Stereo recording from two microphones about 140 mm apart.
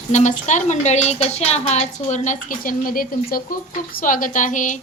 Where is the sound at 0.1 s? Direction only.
60° left (ahead or behind); by 3.6 s 90° left.